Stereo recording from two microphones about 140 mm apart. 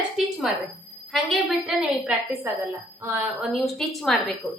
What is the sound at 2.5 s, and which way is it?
Speech, 20° right (ahead or behind).